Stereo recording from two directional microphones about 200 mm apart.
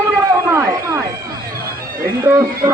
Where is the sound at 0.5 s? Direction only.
10° right (ahead or behind).